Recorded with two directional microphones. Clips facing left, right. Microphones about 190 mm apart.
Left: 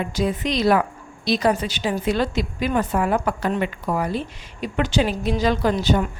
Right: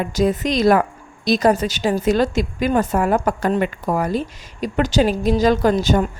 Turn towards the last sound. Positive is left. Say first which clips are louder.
# right 3 dB
turn(degrees=-45)  # may be behind; listen again after turning